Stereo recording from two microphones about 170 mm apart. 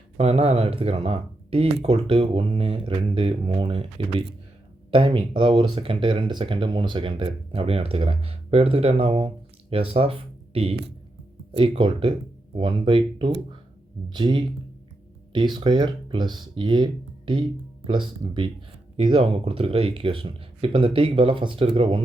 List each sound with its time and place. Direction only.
0.2 s speech: 35° right (ahead or behind)
11.8 s speech: 25° right (ahead or behind)